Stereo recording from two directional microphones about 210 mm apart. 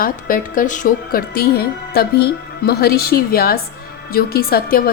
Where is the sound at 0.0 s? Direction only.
40° left (ahead or behind).